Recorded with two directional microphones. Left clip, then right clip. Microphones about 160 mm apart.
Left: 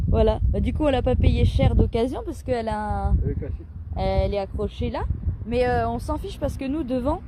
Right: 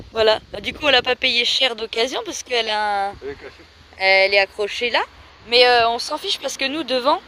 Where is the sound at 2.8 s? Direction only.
20° right (ahead or behind).